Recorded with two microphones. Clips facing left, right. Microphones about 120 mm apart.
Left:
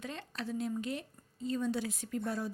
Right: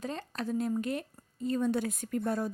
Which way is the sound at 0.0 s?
40° right (ahead or behind).